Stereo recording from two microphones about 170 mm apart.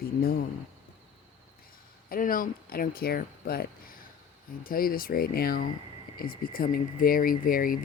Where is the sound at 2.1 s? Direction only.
55° left (ahead or behind).